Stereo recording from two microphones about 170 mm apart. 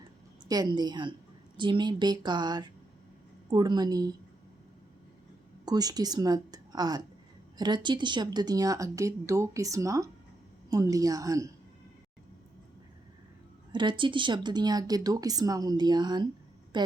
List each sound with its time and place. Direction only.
0.4 s speech: 25° right (ahead or behind)
5.6 s speech: 20° right (ahead or behind)
13.7 s speech: 30° right (ahead or behind)